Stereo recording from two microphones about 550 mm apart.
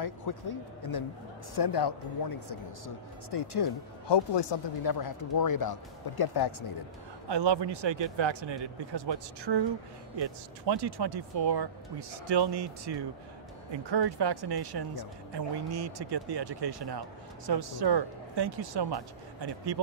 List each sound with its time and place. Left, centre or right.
0.0 s speech: left
7.2 s speech: right